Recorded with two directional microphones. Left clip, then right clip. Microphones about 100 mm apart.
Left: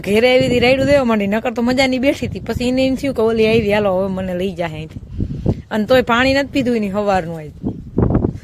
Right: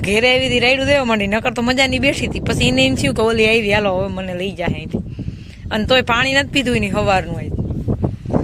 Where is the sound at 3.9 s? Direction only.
45° left (ahead or behind).